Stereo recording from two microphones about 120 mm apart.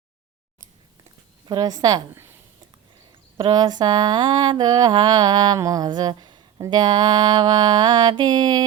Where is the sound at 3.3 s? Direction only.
35° right (ahead or behind).